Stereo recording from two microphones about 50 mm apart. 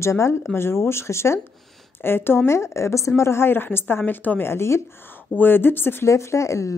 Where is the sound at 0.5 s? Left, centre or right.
Left.